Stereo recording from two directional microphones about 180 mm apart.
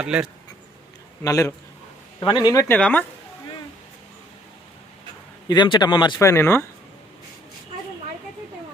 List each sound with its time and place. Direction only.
0.0 s speech: 5° right (ahead or behind)
1.2 s a man's voice: 15° left (ahead or behind)
2.7 s a man's voice: 5° left (ahead or behind)
5.5 s speech: 25° left (ahead or behind)